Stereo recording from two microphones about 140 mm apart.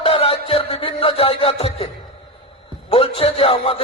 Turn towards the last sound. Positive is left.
turn(degrees=40)  # may be behind; listen again after turning